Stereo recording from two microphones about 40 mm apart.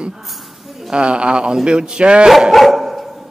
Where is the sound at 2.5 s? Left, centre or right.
Centre.